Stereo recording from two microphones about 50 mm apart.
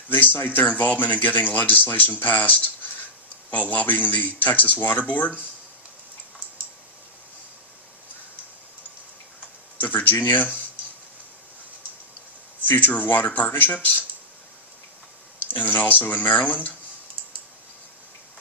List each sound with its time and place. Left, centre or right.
0.1 s speech: left
9.8 s speech: left
12.6 s speech: left
15.5 s speech: left